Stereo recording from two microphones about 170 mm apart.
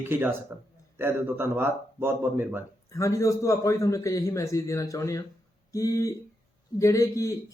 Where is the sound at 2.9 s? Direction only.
20° left (ahead or behind).